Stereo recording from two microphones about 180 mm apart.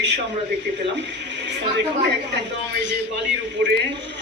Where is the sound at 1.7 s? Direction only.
75° right (ahead or behind).